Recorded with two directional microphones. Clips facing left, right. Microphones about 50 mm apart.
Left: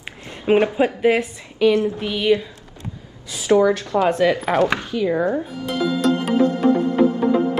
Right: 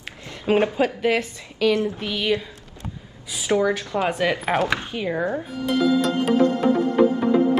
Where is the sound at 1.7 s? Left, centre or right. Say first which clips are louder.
Left 2 dB; left.